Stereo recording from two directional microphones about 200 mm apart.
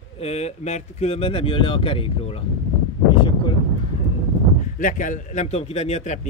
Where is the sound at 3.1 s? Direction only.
25° left (ahead or behind).